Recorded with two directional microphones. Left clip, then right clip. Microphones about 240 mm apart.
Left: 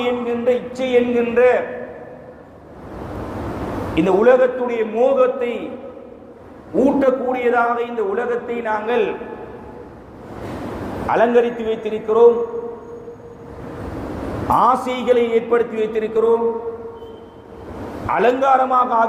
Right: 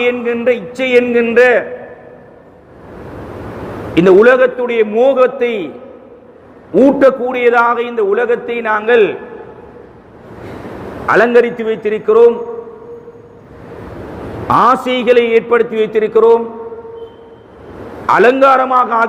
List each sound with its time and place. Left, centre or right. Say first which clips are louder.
0.0 s a man's voice: right 6 dB; right
3.9 s a man's voice: right 6 dB; right
7.0 s a man's voice: right 7 dB; right
11.1 s a man's voice: right 6 dB; right
14.5 s a man's voice: right 5 dB; right
18.0 s a man's voice: right 8 dB; right